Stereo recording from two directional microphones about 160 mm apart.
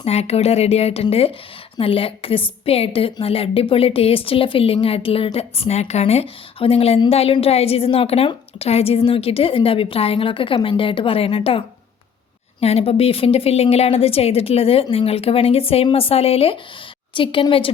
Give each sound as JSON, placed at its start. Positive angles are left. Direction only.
{"t": 0.0, "sound": "a woman's voice", "side_deg": 40}